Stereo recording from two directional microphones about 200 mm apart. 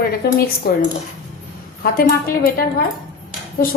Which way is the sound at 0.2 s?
50° left (ahead or behind).